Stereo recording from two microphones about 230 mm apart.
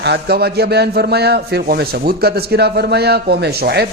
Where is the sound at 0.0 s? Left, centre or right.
Right.